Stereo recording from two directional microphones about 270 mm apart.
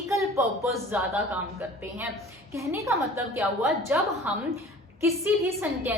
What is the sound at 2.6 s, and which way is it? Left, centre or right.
A woman's voice, centre.